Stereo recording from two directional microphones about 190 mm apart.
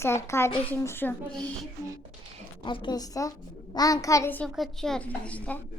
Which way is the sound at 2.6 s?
25° left (ahead or behind).